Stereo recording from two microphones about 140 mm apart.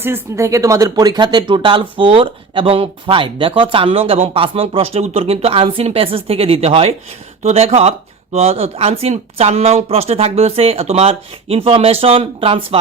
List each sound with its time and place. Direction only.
0.0 s speech: 15° right (ahead or behind); by 12.6 s 40° right (ahead or behind)